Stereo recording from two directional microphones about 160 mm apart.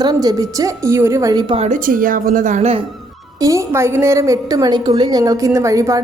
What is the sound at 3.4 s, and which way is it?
Speech, 20° right (ahead or behind).